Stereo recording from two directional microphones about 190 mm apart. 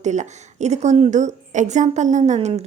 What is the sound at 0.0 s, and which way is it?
A woman's voice, 40° right (ahead or behind).